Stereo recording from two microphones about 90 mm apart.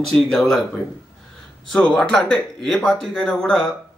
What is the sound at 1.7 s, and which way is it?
Speech, 10° left (ahead or behind).